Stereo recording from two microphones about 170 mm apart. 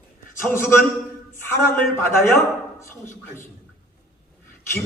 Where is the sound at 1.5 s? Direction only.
10° left (ahead or behind).